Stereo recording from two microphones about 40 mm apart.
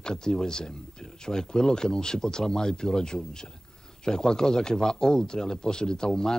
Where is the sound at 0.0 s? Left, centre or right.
Centre.